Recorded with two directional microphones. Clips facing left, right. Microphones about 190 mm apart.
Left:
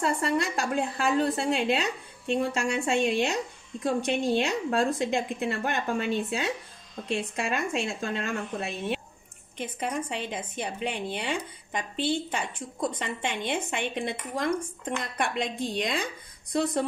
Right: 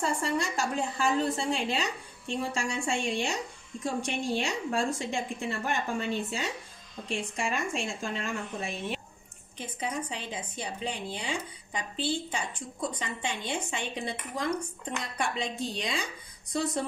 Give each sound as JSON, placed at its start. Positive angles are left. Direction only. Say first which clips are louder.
{"t": 0.0, "sound": "speech", "louder": "left 3 dB", "side_deg": 60}
{"t": 15.1, "sound": "speech", "louder": "left 1 dB", "side_deg": 55}